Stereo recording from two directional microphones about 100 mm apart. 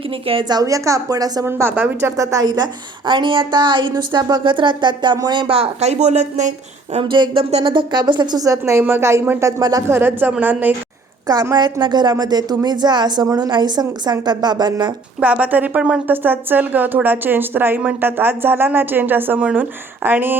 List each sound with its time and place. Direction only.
0.4 s a woman's voice: 40° right (ahead or behind)
1.5 s speech: 25° right (ahead or behind); by 2.6 s 40° right (ahead or behind)
3.1 s speech: 55° right (ahead or behind)
5.5 s speech: 90° right
7.0 s speech: 55° right (ahead or behind); by 9.5 s 25° right (ahead or behind)
9.5 s a woman's voice: 40° right (ahead or behind)
9.9 s speech: 20° right (ahead or behind)
11.5 s speech: 50° right (ahead or behind)
15.2 s speech: 15° right (ahead or behind)